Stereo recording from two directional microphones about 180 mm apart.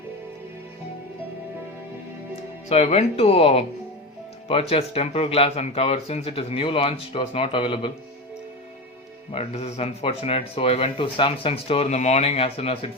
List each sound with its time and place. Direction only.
2.6 s speech: 35° left (ahead or behind)
9.3 s speech: 35° left (ahead or behind)